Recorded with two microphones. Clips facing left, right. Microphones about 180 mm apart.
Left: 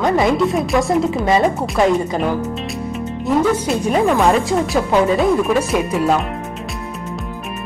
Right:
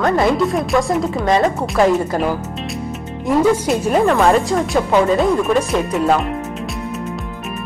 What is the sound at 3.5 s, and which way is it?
A woman's voice, centre (ahead or behind).